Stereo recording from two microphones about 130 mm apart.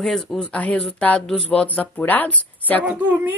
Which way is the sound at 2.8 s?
10° right (ahead or behind).